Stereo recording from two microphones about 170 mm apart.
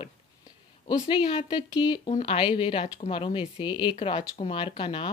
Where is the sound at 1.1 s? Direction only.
30° left (ahead or behind).